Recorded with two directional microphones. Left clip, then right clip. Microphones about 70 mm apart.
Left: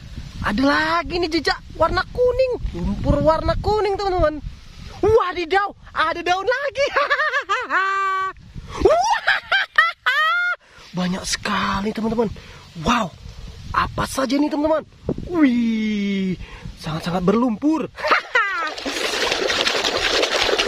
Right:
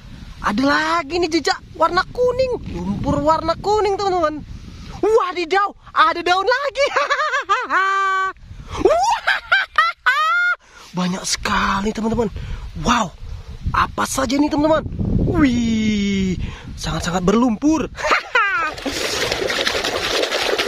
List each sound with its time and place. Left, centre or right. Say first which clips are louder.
0.4 s speech: right 1 dB; right
5.9 s a woman's voice: right 5 dB; right
6.9 s a sound: right 1 dB; right
12.8 s speech: right 2 dB; right
13.7 s duck: right 3 dB; centre
13.9 s speech: right 2 dB; right
18.8 s splash: right 1 dB; right
19.2 s pour: left 1 dB; right